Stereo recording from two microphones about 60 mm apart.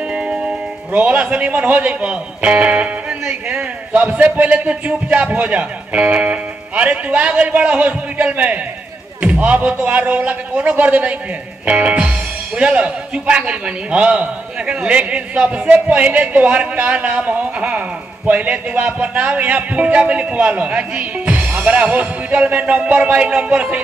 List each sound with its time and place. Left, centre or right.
0.1 s speech: centre